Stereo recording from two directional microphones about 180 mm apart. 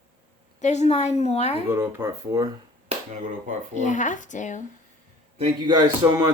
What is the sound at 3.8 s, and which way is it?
Speech, 45° left (ahead or behind).